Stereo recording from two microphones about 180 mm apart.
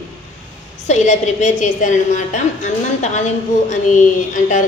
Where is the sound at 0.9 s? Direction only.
40° left (ahead or behind).